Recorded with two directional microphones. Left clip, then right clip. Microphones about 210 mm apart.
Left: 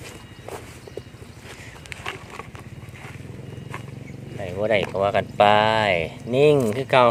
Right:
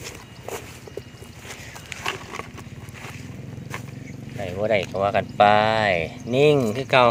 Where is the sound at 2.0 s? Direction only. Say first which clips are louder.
Right 5 dB; 45° right (ahead or behind).